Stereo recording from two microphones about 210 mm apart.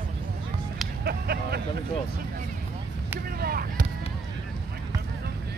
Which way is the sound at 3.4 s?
45° right (ahead or behind).